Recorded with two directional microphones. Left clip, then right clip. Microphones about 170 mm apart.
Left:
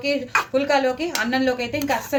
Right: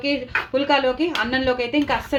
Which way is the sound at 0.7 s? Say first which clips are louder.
Right 1 dB; 40° right (ahead or behind).